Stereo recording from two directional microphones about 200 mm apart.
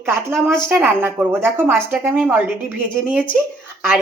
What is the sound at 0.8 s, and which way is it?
A woman's voice, 10° right (ahead or behind).